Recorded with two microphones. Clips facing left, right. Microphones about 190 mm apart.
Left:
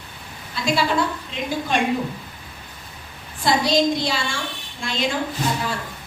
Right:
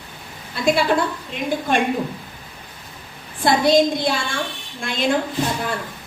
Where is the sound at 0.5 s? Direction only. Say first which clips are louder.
Right 3 dB; 55° right (ahead or behind).